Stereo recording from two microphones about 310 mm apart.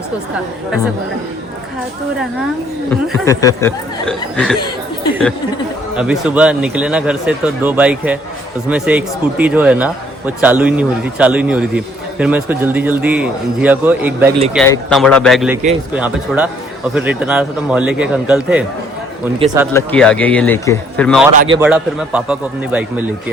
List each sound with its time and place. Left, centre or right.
2.9 s a man's voice: centre
6.0 s a man's voice: centre
19.7 s a man's voice: centre
21.3 s a man's voice: centre
21.6 s a man's voice: centre